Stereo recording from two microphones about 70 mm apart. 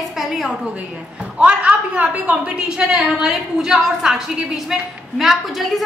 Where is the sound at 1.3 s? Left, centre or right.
Centre.